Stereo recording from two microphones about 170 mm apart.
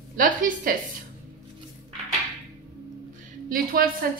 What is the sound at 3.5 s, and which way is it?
Speech, 60° right (ahead or behind).